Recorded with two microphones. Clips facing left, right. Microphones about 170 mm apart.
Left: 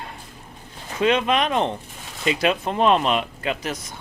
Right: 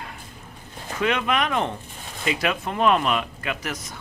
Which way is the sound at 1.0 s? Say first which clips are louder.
Left 4 dB; 25° left (ahead or behind).